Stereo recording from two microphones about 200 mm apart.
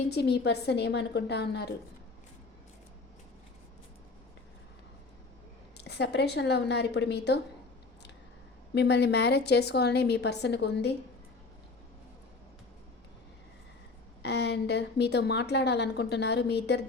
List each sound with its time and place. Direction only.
0.1 s a woman's voice: 55° left (ahead or behind)
5.7 s a woman's voice: 55° left (ahead or behind)
8.7 s a woman's voice: 55° left (ahead or behind)
14.2 s a woman's voice: 55° left (ahead or behind)